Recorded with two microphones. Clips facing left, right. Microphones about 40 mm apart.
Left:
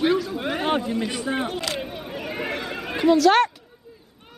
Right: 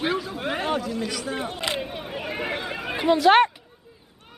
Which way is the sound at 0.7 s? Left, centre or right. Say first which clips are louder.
Left 3 dB; left.